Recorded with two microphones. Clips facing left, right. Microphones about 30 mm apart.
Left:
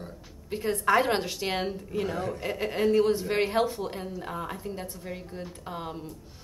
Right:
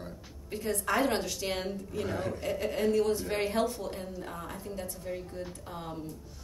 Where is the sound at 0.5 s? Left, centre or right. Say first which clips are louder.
Left 6 dB; left.